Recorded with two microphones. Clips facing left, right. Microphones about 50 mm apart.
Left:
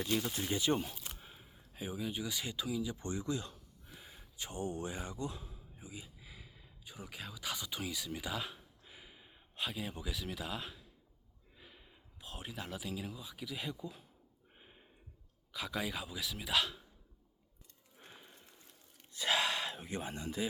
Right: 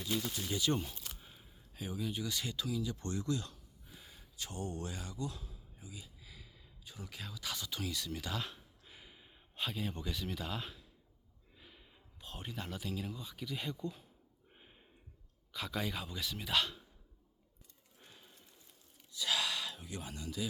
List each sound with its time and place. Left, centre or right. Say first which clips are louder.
0.3 s speech: left 2 dB; left
0.8 s speech: left 2 dB; centre
14.5 s a sound: left 1 dB; centre
15.5 s speech: even; centre
18.0 s a sound: left 4 dB; left
19.1 s gasp: left 3 dB; left